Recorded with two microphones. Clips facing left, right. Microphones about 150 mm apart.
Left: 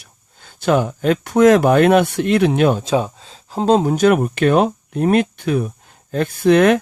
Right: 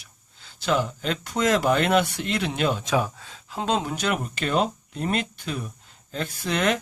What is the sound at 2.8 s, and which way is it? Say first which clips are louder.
Speech: left 6 dB; 25° left (ahead or behind).